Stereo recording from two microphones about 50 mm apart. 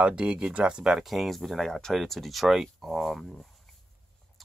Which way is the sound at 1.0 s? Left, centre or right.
Centre.